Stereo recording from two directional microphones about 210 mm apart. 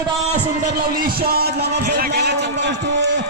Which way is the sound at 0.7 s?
45° right (ahead or behind).